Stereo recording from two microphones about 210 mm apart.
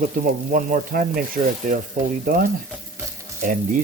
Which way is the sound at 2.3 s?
45° right (ahead or behind).